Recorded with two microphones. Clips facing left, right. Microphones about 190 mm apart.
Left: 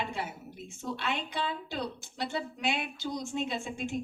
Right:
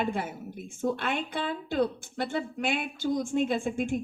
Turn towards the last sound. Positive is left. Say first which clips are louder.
# right 7 dB
turn(degrees=-50)  # may be behind; listen again after turning